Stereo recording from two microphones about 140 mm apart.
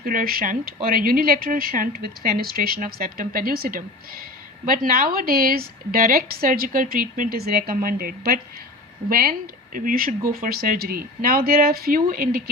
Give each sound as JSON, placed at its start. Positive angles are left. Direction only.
{"t": 0.0, "sound": "speech", "side_deg": -85}